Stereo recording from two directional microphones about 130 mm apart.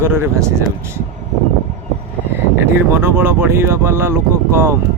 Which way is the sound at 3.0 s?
15° right (ahead or behind).